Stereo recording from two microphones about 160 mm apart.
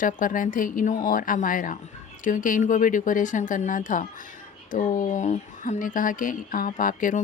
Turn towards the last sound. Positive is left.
turn(degrees=55)  # may be behind; listen again after turning